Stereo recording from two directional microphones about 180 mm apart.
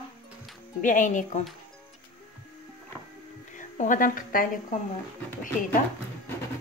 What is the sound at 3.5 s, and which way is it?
Speech, 45° left (ahead or behind).